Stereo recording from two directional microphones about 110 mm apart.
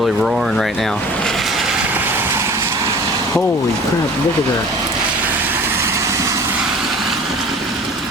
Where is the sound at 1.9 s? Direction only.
15° right (ahead or behind).